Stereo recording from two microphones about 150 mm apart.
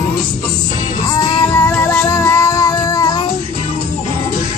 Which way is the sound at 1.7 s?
10° left (ahead or behind).